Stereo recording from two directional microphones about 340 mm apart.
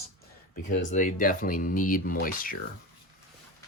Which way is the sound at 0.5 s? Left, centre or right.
Left.